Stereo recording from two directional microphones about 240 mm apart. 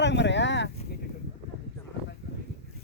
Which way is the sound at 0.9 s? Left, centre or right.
Left.